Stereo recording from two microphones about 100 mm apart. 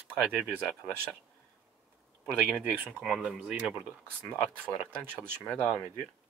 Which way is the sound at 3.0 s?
5° right (ahead or behind).